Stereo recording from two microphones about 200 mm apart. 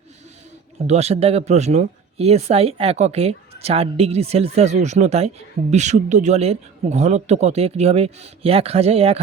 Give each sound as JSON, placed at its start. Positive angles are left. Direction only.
{"t": 0.9, "sound": "speech", "side_deg": -30}